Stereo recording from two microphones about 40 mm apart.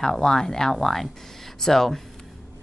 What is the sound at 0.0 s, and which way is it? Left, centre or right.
Speech, centre.